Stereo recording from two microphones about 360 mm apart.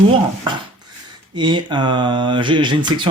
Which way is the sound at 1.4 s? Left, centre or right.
Centre.